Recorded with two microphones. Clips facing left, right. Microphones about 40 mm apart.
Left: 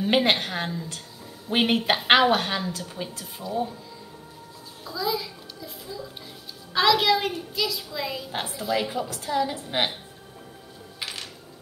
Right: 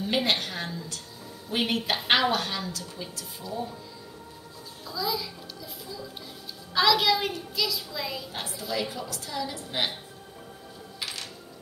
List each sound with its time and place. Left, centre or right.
0.0 s a woman's voice: left
4.8 s a child's voice: centre
8.3 s a woman's voice: left
11.0 s music: centre